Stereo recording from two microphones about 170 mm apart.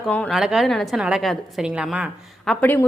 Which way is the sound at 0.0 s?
5° left (ahead or behind).